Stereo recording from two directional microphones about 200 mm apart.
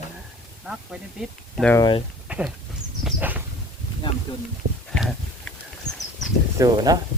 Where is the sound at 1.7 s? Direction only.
25° left (ahead or behind).